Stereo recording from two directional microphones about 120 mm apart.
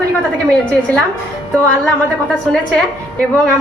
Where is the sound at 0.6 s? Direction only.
10° left (ahead or behind).